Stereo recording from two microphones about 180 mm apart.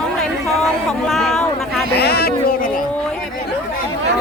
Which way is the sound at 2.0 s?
60° left (ahead or behind).